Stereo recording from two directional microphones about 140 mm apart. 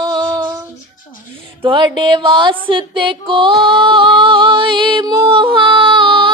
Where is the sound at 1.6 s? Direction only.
35° right (ahead or behind).